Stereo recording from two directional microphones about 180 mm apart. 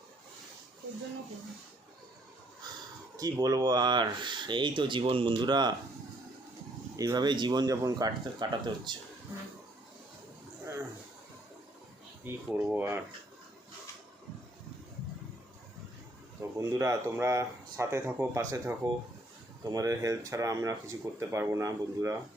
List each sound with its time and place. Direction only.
3.2 s speech: 20° right (ahead or behind)
6.9 s speech: 20° right (ahead or behind)
12.2 s speech: 10° right (ahead or behind)
16.4 s speech: 15° right (ahead or behind)